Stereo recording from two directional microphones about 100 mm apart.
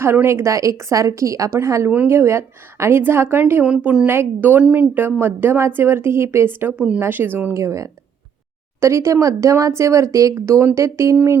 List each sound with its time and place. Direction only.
0.0 s a woman's voice: 25° right (ahead or behind)